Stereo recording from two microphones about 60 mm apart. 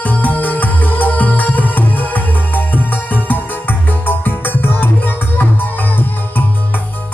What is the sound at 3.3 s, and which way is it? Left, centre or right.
Music, left.